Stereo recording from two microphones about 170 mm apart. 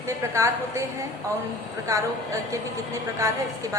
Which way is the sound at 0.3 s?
15° right (ahead or behind).